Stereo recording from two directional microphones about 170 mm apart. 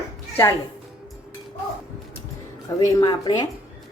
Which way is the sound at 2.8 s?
20° left (ahead or behind).